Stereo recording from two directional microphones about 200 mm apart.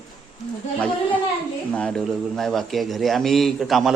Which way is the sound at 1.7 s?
5° left (ahead or behind).